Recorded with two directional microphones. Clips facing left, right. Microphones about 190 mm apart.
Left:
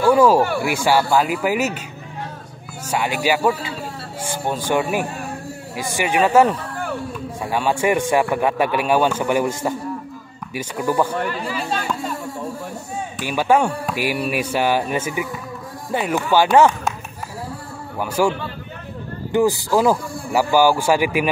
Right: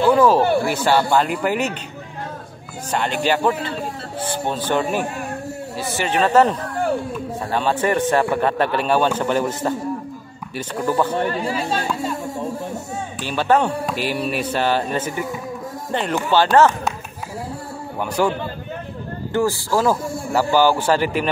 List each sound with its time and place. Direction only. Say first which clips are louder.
0.0 s a sound: left 1 dB; 10° left (ahead or behind)
0.7 s speech: even; 10° left (ahead or behind)
2.9 s a man's voice: even; 10° left (ahead or behind)
11.1 s speech: right 3 dB; 30° right (ahead or behind)
11.9 s a sound: right 1 dB; centre (ahead or behind)
13.2 s a man's voice: left 1 dB; 10° left (ahead or behind)
17.9 s a man's voice: left 1 dB; 5° left (ahead or behind)
19.3 s a man's voice: left 3 dB; 15° left (ahead or behind)